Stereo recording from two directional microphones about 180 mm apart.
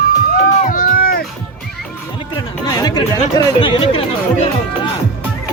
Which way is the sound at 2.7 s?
20° left (ahead or behind).